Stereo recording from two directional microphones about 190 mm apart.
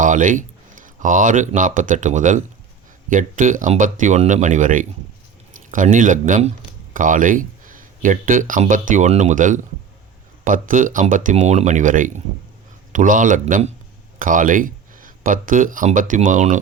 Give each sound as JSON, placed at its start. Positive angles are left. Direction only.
{"t": 0.0, "sound": "speech", "side_deg": -40}